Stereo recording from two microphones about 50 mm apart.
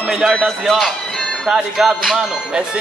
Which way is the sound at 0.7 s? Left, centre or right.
Centre.